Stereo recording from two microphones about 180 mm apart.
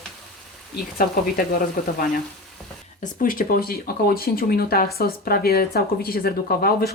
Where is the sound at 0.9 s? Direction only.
55° left (ahead or behind).